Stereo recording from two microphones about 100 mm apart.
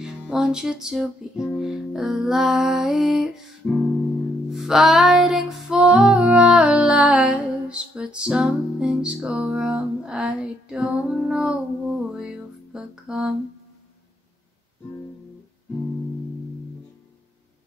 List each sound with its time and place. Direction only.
0.0 s music: 10° right (ahead or behind)
3.6 s music: 20° left (ahead or behind)
4.5 s music: 5° right (ahead or behind)